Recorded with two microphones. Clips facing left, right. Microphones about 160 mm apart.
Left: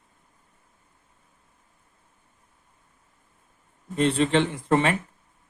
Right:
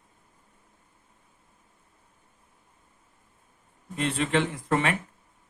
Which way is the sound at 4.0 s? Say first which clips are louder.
Left 5 dB; 30° left (ahead or behind).